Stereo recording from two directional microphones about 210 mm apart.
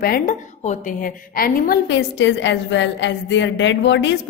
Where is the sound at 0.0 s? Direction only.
45° left (ahead or behind).